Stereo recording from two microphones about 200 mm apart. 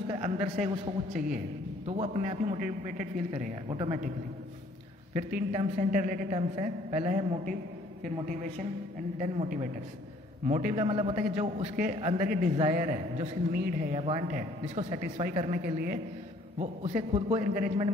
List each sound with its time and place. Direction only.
0.1 s speech: 35° right (ahead or behind)
1.9 s speech: 35° right (ahead or behind)
3.7 s speech: 25° right (ahead or behind)
5.1 s speech: 35° right (ahead or behind)
9.2 s speech: 40° right (ahead or behind)
13.9 s speech: 30° right (ahead or behind)
16.5 s speech: 35° right (ahead or behind)